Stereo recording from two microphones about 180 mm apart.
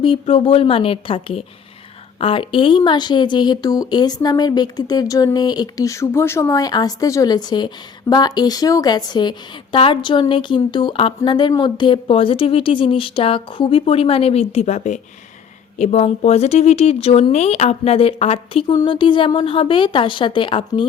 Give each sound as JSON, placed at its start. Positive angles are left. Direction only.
{"t": 0.0, "sound": "speech", "side_deg": 30}